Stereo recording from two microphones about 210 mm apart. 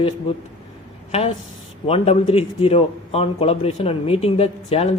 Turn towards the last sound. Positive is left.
turn(degrees=30)  # may be behind; listen again after turning